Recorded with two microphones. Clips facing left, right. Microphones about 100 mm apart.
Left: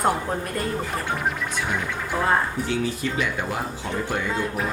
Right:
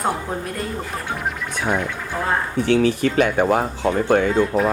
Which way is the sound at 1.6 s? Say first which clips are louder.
Right 5 dB; centre (ahead or behind).